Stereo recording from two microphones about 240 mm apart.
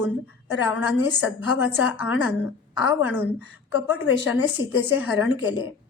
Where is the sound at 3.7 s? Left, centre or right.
Left.